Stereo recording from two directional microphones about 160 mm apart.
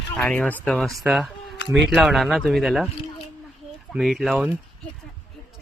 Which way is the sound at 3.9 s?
Centre (ahead or behind).